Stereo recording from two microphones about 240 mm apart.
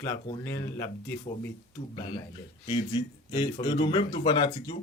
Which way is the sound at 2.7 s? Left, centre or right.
Centre.